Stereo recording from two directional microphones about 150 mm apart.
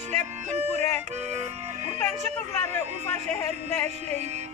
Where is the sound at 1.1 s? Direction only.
50° right (ahead or behind).